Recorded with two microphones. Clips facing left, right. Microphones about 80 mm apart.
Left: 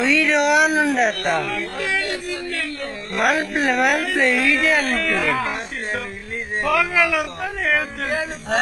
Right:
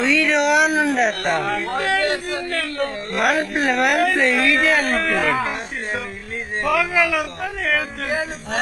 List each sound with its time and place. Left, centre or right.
0.0 s speech: centre
1.5 s a man's voice: right
3.2 s speech: centre
6.7 s speech: centre